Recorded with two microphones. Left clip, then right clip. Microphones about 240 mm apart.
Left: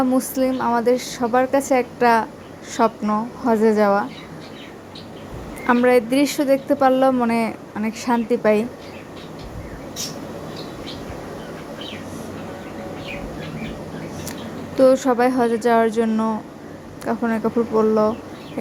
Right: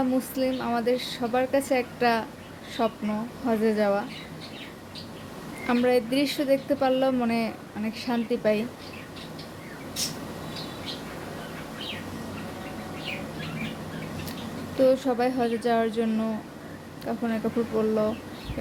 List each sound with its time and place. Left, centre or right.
0.2 s a woman's voice: centre
5.6 s a woman's voice: centre
14.8 s a woman's voice: centre